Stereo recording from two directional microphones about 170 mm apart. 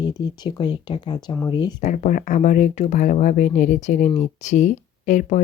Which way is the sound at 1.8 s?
45° left (ahead or behind).